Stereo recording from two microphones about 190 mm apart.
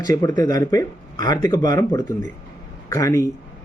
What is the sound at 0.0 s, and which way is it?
Speech, 20° left (ahead or behind).